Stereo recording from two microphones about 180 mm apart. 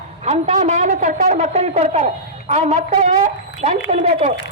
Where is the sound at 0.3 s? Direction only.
40° right (ahead or behind).